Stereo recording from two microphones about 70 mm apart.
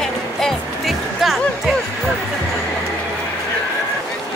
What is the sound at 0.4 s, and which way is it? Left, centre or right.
Music, centre.